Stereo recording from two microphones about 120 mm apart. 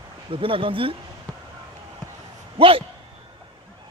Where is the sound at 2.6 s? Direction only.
50° right (ahead or behind).